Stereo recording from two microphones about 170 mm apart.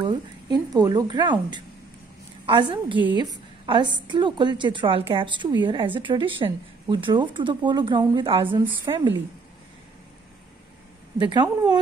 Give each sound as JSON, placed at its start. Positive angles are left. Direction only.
{"t": 0.0, "sound": "a woman's voice", "side_deg": -25}
{"t": 11.1, "sound": "a woman's voice", "side_deg": -25}